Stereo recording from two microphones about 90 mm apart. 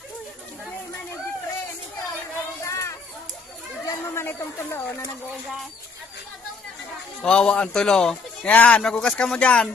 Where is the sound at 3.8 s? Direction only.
25° left (ahead or behind).